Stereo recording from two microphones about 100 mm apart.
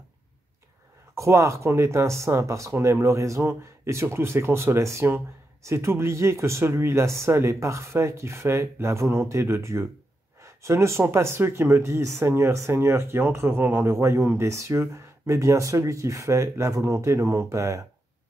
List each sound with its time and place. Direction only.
1.1 s speech: 30° right (ahead or behind)